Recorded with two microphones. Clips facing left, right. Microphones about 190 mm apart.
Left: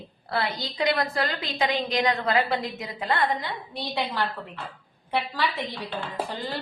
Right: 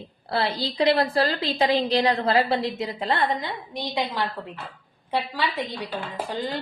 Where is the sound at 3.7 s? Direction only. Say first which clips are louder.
Right 2 dB; 15° right (ahead or behind).